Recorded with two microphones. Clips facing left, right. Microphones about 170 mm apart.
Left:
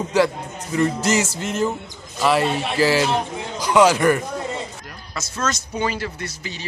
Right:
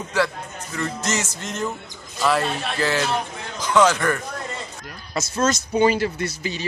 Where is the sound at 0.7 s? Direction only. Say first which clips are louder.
Left 7 dB; 15° left (ahead or behind).